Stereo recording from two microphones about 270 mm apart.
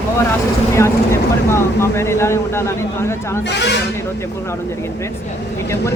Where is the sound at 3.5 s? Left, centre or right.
Left.